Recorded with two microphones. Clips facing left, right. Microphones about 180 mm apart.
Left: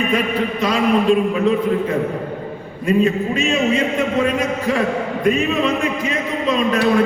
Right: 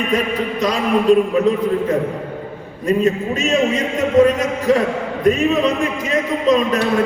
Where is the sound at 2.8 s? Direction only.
40° right (ahead or behind).